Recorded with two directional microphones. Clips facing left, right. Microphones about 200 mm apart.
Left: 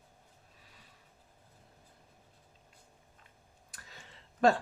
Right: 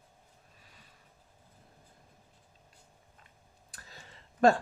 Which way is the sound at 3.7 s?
40° right (ahead or behind).